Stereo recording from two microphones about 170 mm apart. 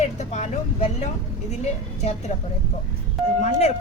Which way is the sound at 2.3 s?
40° left (ahead or behind).